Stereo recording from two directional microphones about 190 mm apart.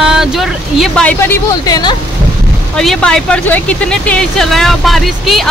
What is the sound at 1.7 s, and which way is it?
Speech, 20° left (ahead or behind).